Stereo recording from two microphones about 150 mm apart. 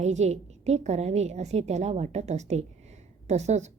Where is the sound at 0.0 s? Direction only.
50° right (ahead or behind).